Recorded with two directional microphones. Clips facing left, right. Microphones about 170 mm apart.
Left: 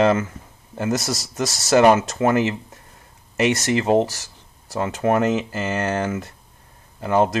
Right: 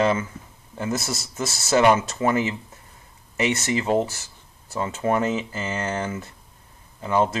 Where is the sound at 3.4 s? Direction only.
75° left (ahead or behind).